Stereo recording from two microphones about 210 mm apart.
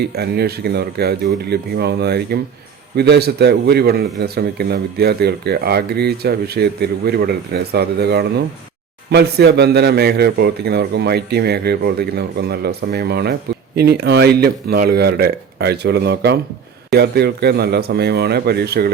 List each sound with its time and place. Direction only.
0.0 s speech: 50° right (ahead or behind)